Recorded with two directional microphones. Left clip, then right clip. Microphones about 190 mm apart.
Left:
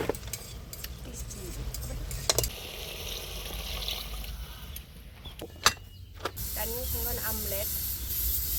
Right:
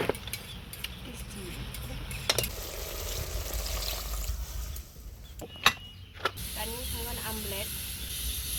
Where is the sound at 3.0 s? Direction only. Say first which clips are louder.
Left 1 dB; 15° right (ahead or behind).